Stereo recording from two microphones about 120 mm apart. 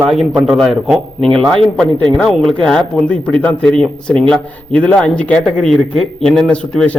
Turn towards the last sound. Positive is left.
turn(degrees=5)  # may be behind; listen again after turning